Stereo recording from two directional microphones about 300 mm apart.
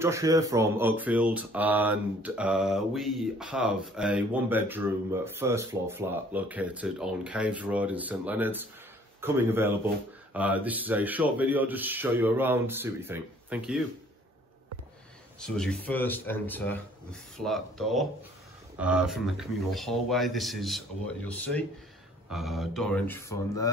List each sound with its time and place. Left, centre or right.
0.0 s speech: centre
15.4 s speech: centre